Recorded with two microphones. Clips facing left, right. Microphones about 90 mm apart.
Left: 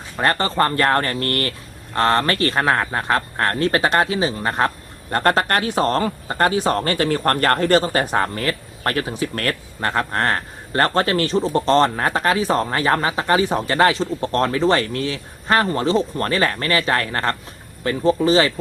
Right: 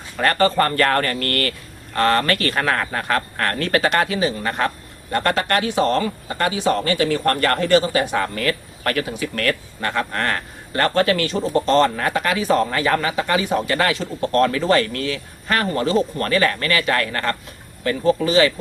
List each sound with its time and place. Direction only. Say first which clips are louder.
0.2 s a man's voice: right 1 dB; 25° left (ahead or behind)